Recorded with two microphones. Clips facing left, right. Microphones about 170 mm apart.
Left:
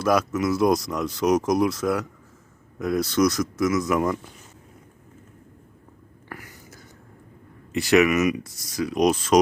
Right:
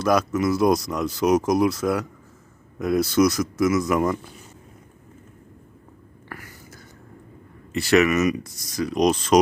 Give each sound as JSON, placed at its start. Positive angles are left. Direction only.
{"t": 0.0, "sound": "speech", "side_deg": 5}
{"t": 6.2, "sound": "whispering", "side_deg": 15}
{"t": 7.7, "sound": "speech", "side_deg": 15}